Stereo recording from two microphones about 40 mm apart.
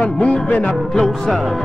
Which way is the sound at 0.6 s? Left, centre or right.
Centre.